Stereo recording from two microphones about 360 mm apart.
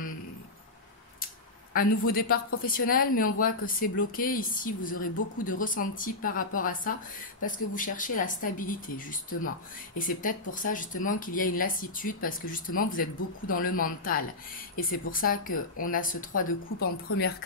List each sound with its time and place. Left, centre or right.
1.7 s a woman's voice: left